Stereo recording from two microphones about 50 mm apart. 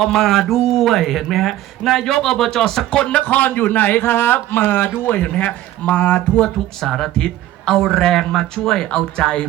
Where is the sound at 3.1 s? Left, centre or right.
Left.